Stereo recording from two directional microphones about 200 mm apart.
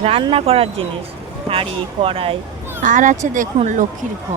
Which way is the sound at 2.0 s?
30° right (ahead or behind).